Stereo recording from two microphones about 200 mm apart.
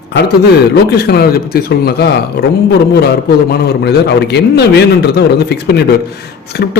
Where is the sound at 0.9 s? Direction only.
55° left (ahead or behind).